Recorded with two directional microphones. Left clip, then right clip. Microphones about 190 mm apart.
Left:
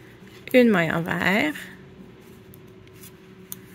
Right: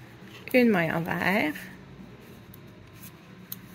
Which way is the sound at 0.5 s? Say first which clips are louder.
Left 4 dB; 45° left (ahead or behind).